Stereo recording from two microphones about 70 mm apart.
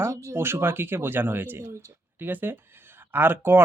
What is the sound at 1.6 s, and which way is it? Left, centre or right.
Speech, right.